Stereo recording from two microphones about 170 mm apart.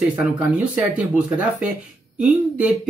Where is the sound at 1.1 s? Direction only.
5° right (ahead or behind).